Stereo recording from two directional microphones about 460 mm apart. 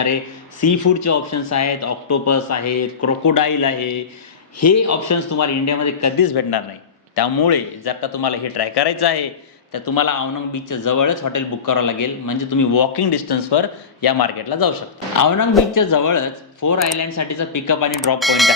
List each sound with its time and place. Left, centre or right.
0.6 s speech: left
7.2 s a man's voice: left
18.2 s speech: centre